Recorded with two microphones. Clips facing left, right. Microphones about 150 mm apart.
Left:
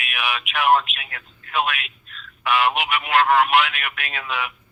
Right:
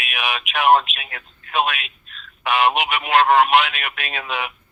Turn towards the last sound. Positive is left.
turn(degrees=-20)  # may be behind; listen again after turning